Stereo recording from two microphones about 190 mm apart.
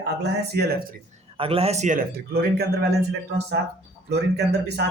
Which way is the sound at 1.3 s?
30° right (ahead or behind).